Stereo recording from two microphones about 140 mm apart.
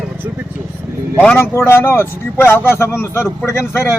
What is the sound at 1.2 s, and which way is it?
Speech, 10° left (ahead or behind).